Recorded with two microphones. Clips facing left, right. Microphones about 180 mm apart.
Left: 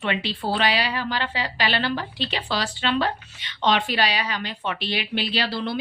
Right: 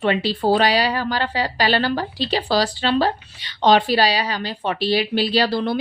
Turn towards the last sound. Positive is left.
turn(degrees=-45)  # may be behind; listen again after turning